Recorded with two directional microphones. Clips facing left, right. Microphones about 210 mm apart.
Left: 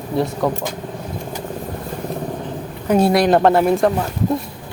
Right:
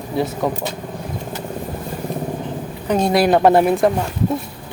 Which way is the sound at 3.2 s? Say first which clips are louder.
Right 1 dB; 10° right (ahead or behind).